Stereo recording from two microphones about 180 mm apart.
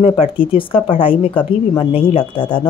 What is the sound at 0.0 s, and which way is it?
A woman's voice, 30° left (ahead or behind).